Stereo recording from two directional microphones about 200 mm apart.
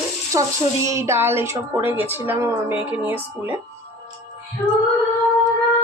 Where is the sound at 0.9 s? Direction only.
15° right (ahead or behind).